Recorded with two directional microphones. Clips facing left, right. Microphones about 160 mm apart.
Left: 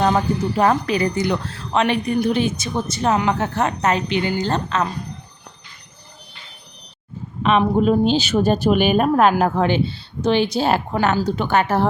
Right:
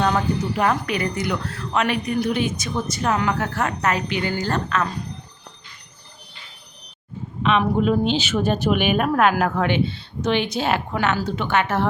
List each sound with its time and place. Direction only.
0.0 s speech: 35° left (ahead or behind)
7.8 s speech: 35° left (ahead or behind)